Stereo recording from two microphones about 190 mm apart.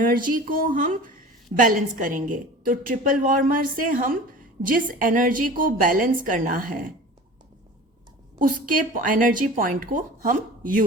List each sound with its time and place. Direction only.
0.0 s a woman's voice: 45° right (ahead or behind)
8.4 s a woman's voice: 45° right (ahead or behind)